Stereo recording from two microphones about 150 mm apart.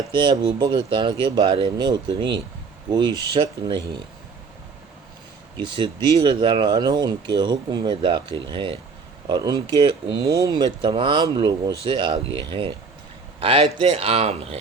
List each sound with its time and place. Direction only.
0.1 s speech: 30° right (ahead or behind)
3.1 s speech: 20° left (ahead or behind)
3.3 s speech: 35° right (ahead or behind)
5.5 s speech: 30° right (ahead or behind)